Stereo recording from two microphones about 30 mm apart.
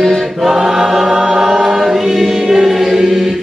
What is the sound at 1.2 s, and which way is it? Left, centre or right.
Chant, centre.